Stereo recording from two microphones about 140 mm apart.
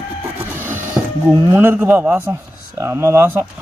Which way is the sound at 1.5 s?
15° right (ahead or behind).